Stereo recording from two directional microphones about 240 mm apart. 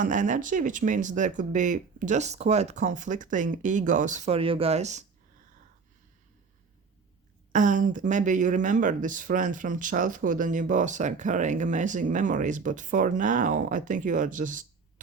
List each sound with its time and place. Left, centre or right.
0.0 s speech: right
7.5 s speech: right